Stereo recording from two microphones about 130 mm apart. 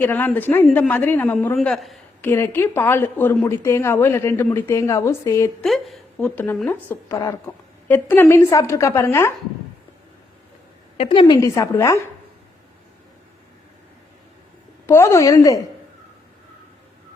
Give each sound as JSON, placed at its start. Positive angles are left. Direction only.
{"t": 0.0, "sound": "speech", "side_deg": 15}
{"t": 1.5, "sound": "speech", "side_deg": 0}
{"t": 2.2, "sound": "speech", "side_deg": 15}
{"t": 5.6, "sound": "a woman's voice", "side_deg": 0}
{"t": 6.2, "sound": "speech", "side_deg": 15}
{"t": 10.9, "sound": "a woman's voice", "side_deg": 45}
{"t": 11.3, "sound": "speech", "side_deg": 25}
{"t": 14.8, "sound": "speech", "side_deg": 20}